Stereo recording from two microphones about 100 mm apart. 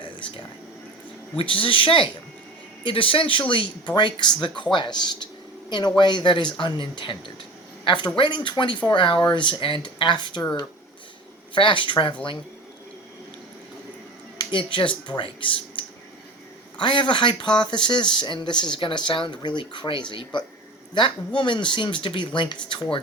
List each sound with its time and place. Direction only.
0.0 s a sound: 55° left (ahead or behind)
1.4 s speech: 60° left (ahead or behind)
11.5 s speech: 55° left (ahead or behind)
14.3 s speech: 55° left (ahead or behind)
16.8 s speech: 55° left (ahead or behind)